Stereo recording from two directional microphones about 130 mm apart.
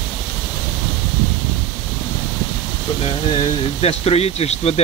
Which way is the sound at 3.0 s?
45° left (ahead or behind).